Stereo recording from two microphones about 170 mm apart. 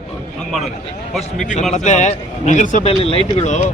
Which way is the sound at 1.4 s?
45° left (ahead or behind).